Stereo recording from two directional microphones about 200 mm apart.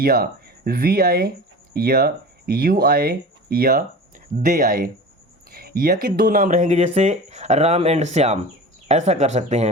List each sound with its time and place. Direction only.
0.0 s speech: 50° right (ahead or behind)